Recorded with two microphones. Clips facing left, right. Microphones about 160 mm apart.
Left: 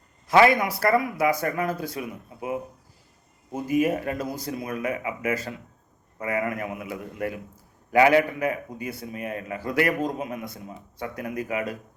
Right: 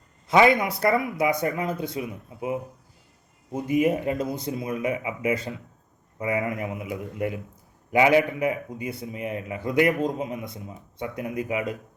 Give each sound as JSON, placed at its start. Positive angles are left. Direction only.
{"t": 0.3, "sound": "a man's voice", "side_deg": -25}
{"t": 3.7, "sound": "a man's voice", "side_deg": -25}